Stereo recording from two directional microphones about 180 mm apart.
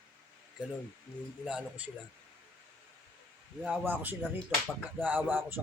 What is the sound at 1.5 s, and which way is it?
Speech, 5° right (ahead or behind).